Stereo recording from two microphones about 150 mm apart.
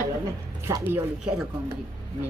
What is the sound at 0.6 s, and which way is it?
Speech, 15° right (ahead or behind).